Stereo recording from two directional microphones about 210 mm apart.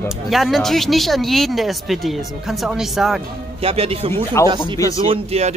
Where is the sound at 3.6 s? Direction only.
25° right (ahead or behind).